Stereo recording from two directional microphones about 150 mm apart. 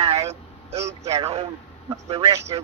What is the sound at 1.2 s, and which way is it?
Speech, 40° right (ahead or behind).